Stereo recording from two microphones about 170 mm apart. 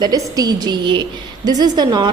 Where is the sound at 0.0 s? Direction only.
25° right (ahead or behind).